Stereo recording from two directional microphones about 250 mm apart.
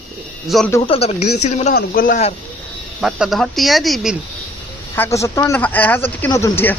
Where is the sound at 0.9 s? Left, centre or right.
Left.